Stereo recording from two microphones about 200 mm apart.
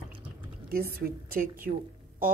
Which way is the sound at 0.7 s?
45° right (ahead or behind).